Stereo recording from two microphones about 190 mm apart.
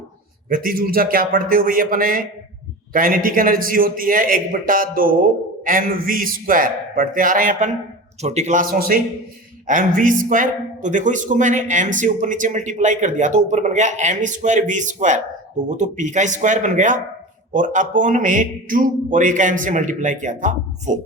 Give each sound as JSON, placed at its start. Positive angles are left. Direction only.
{"t": 0.4, "sound": "a man's voice", "side_deg": -50}